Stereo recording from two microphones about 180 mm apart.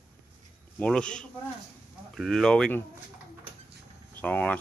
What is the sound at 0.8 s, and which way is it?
Speech, 5° left (ahead or behind).